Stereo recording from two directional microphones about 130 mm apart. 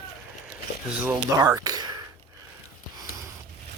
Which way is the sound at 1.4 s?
30° right (ahead or behind).